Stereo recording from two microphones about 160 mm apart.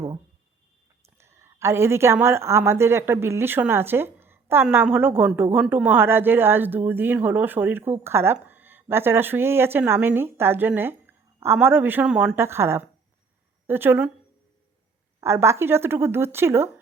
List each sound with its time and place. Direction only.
1.2 s a woman's voice: 15° right (ahead or behind)
15.2 s speech: 15° right (ahead or behind)